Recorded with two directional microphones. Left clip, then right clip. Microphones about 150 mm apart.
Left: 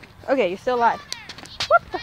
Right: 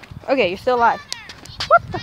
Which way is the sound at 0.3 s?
20° right (ahead or behind).